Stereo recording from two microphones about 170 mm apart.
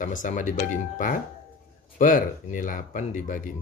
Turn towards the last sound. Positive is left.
turn(degrees=50)  # may be behind; listen again after turning